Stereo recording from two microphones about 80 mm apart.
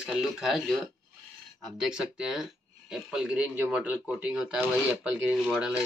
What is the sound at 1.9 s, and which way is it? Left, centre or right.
Speech, centre.